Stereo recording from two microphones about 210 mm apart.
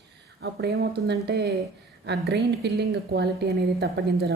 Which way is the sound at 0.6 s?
50° right (ahead or behind).